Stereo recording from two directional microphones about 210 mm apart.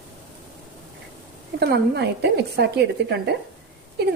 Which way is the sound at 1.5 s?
50° right (ahead or behind).